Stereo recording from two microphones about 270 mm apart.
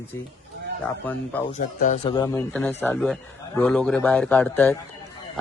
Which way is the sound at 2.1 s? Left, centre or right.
Centre.